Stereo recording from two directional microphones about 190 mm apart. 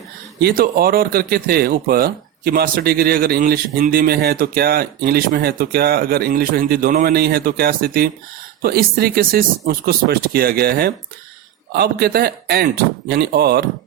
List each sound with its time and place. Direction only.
0.3 s speech: 55° right (ahead or behind)